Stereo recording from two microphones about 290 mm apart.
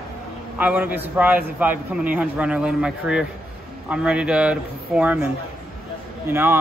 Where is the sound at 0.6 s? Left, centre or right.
Centre.